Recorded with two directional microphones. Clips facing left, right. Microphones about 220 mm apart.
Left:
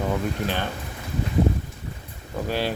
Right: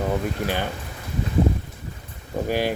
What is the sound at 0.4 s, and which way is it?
Speech, 10° right (ahead or behind).